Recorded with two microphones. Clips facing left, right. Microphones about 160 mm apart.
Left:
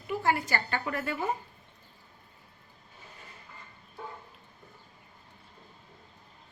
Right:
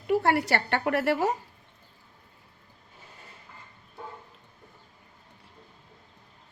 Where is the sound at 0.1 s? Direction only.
70° right (ahead or behind).